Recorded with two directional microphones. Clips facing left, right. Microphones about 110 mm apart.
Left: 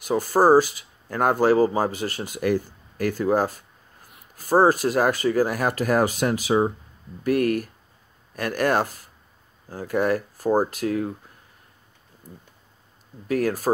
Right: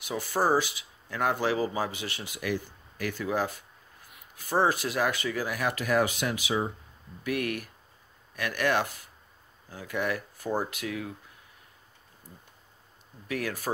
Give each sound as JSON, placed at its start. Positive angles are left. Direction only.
{"t": 0.0, "sound": "speech", "side_deg": 45}
{"t": 13.3, "sound": "speech", "side_deg": 40}